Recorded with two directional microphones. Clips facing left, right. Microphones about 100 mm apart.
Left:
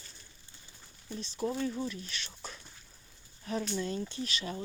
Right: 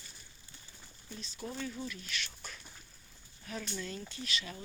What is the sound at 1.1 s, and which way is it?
Speech, 40° left (ahead or behind).